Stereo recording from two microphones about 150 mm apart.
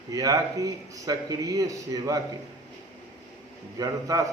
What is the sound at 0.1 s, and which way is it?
A man's voice, 25° right (ahead or behind).